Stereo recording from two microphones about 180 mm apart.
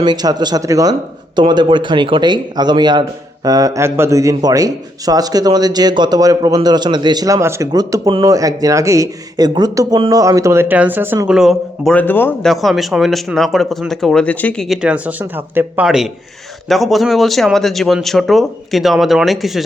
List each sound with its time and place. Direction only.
0.0 s a man's voice: 25° right (ahead or behind); by 12.5 s 10° left (ahead or behind)
12.5 s speech: centre (ahead or behind)